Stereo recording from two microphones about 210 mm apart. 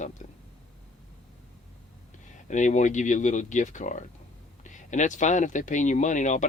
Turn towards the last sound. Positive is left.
turn(degrees=35)  # may be behind; listen again after turning